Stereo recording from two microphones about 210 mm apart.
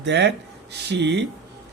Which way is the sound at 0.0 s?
55° right (ahead or behind).